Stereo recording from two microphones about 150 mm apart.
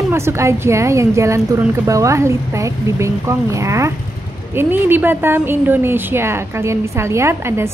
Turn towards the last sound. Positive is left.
turn(degrees=-15)  # may be behind; listen again after turning